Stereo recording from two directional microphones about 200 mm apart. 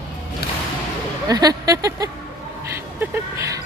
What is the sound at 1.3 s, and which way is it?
Speech, 20° right (ahead or behind).